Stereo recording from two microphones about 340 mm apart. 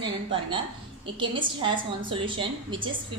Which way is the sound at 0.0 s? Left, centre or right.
Centre.